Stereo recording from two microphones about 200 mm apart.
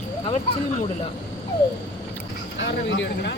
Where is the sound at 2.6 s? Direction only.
65° left (ahead or behind).